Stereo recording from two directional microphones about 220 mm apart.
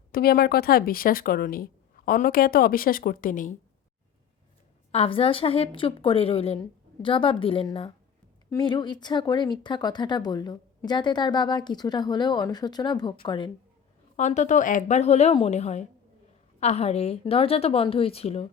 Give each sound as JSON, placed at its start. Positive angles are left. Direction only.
{"t": 0.1, "sound": "a woman's voice", "side_deg": 45}
{"t": 4.9, "sound": "speech", "side_deg": 25}
{"t": 14.2, "sound": "a woman's voice", "side_deg": 35}